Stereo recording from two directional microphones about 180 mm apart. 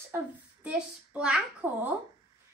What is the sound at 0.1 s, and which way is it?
A woman's voice, 5° right (ahead or behind).